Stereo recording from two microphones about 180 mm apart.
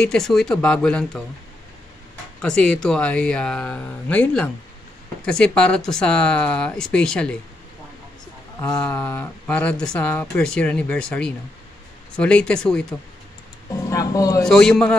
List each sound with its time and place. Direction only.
0.0 s speech: 5° left (ahead or behind)
2.4 s speech: 5° left (ahead or behind)
8.6 s speech: 10° left (ahead or behind)
13.7 s speech: 20° left (ahead or behind)
14.4 s speech: 5° left (ahead or behind)